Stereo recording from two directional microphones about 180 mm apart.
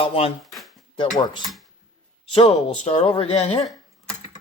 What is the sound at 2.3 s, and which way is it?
Speech, 35° left (ahead or behind).